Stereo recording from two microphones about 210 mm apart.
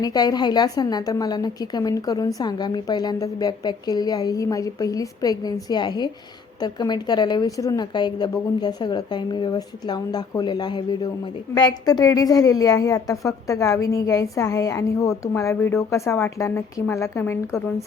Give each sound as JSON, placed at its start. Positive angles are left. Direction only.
{"t": 0.0, "sound": "a woman's voice", "side_deg": 20}